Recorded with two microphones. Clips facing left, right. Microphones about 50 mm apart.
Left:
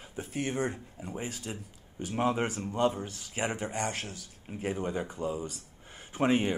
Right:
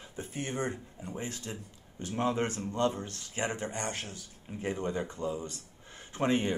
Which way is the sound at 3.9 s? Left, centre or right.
Left.